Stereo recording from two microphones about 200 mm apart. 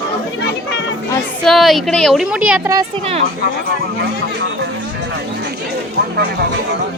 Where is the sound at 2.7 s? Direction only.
30° right (ahead or behind).